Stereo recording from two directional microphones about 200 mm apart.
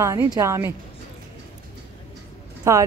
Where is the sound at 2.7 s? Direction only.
15° right (ahead or behind).